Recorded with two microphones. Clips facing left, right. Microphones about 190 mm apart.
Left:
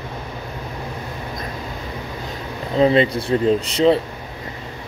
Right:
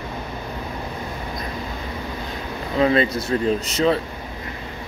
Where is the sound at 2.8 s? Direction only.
25° left (ahead or behind).